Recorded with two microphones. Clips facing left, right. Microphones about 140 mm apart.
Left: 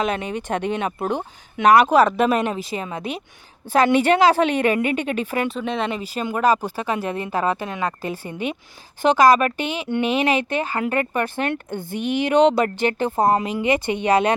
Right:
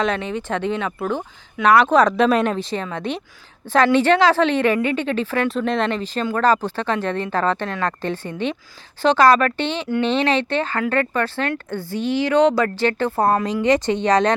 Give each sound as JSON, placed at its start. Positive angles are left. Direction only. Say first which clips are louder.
{"t": 0.0, "sound": "speech", "louder": "right 1 dB", "side_deg": 10}
{"t": 5.5, "sound": "speech", "louder": "right 4 dB", "side_deg": 5}